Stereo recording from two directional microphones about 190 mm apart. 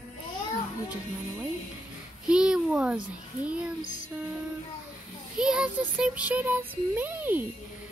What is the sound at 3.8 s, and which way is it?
Music, 40° left (ahead or behind).